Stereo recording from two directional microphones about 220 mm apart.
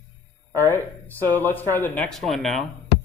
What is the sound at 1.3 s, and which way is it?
A man's voice, 10° left (ahead or behind).